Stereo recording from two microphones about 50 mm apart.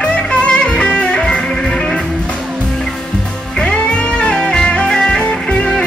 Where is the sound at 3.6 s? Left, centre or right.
Left.